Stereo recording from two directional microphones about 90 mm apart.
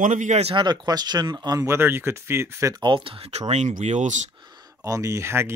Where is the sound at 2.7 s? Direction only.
65° right (ahead or behind); by 3.3 s 85° right.